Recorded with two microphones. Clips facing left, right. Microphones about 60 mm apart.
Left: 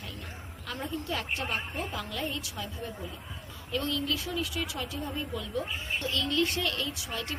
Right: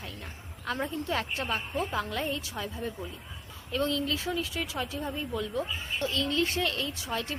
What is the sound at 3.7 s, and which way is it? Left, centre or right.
A woman's voice, right.